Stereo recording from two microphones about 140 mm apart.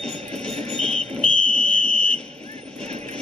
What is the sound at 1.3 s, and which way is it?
Fire alarm, 75° left (ahead or behind).